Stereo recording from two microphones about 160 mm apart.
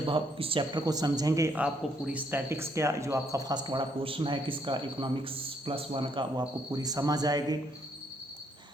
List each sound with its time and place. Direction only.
0.0 s speech: 35° right (ahead or behind)
1.5 s speech: 5° right (ahead or behind); by 7.6 s 25° right (ahead or behind)